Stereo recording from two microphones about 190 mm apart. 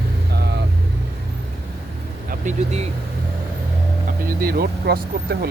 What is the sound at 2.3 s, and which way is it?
Speech, 40° right (ahead or behind).